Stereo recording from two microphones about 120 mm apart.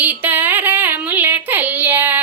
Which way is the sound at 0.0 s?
15° right (ahead or behind).